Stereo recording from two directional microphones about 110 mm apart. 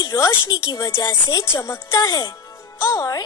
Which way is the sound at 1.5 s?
25° left (ahead or behind).